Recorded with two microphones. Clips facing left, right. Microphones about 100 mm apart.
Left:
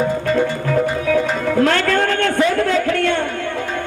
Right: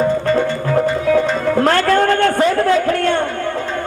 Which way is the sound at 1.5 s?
35° right (ahead or behind).